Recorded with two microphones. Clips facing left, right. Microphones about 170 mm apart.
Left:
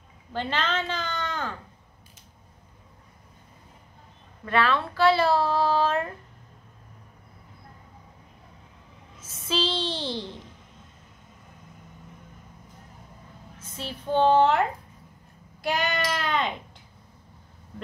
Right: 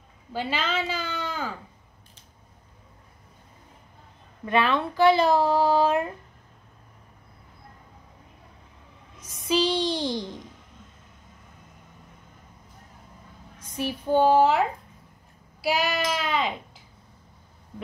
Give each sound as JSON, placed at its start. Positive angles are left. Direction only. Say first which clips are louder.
{"t": 0.3, "sound": "a child's voice", "louder": "even", "side_deg": -10}
{"t": 4.5, "sound": "a child's voice", "louder": "right 1 dB", "side_deg": -20}
{"t": 9.2, "sound": "speech", "louder": "right 4 dB", "side_deg": -15}
{"t": 13.6, "sound": "a child's voice", "louder": "right 7 dB", "side_deg": -15}